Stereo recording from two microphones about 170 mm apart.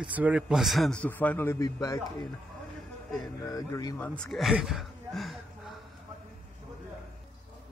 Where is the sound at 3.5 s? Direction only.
20° left (ahead or behind).